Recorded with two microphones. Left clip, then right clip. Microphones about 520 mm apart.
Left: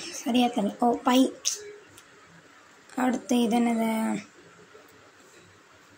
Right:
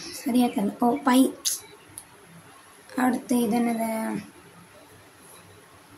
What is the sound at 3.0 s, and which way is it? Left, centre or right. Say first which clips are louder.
Speech: right 1 dB; right.